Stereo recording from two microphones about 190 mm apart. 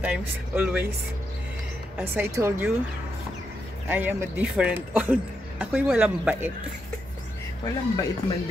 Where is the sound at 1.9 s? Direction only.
10° right (ahead or behind).